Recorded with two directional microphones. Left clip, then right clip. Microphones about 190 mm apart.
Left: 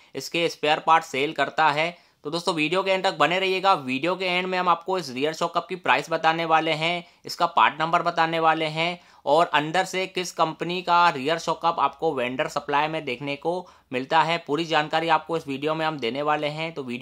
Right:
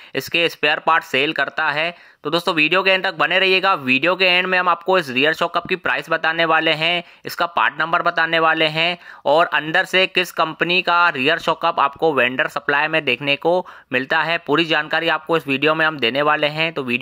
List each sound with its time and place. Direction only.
0.1 s speech: 15° right (ahead or behind)